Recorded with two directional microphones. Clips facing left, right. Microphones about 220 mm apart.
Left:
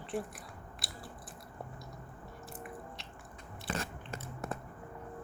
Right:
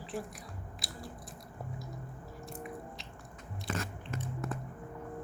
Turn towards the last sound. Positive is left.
turn(degrees=30)  # may be behind; listen again after turning